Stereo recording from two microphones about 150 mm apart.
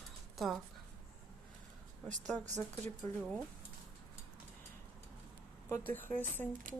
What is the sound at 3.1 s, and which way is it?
Speech, 20° left (ahead or behind).